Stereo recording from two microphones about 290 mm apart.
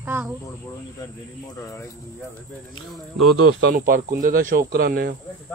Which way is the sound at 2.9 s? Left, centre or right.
Centre.